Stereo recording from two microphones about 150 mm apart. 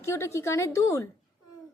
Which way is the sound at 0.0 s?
20° left (ahead or behind).